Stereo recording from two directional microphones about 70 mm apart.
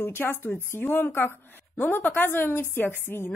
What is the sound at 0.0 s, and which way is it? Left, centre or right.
Speech, left.